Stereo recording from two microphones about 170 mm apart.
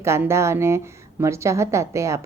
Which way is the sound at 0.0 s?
15° right (ahead or behind).